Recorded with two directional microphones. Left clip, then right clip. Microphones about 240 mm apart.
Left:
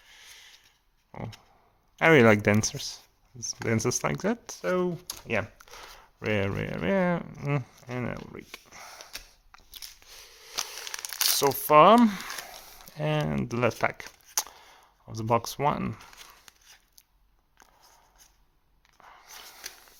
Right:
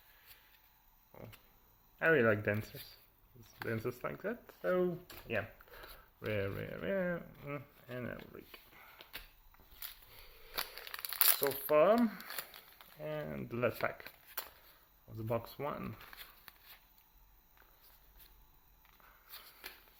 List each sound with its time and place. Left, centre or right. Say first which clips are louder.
2.0 s speech: left 11 dB; left
10.1 s a sound: left 10 dB; left
10.8 s crumpling: left 8 dB; centre
11.7 s speech: left 11 dB; left
13.8 s crumpling: left 10 dB; left
15.1 s speech: left 12 dB; left
16.1 s tearing: left 5 dB; centre
19.0 s a sound: left 12 dB; left